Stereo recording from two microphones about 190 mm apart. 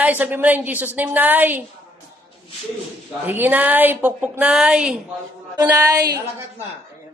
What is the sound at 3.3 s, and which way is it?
A woman's voice, 10° right (ahead or behind).